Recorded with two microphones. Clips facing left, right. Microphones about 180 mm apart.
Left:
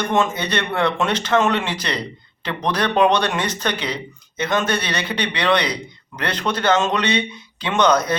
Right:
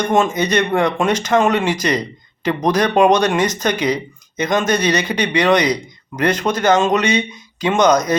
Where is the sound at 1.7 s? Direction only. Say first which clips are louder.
Right 7 dB; 45° right (ahead or behind).